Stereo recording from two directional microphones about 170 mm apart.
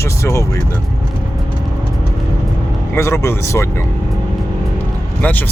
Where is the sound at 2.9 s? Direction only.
15° left (ahead or behind).